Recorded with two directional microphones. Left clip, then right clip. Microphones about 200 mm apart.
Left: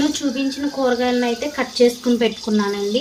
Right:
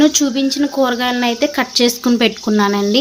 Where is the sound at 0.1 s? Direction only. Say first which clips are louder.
Right 6 dB; 60° right (ahead or behind).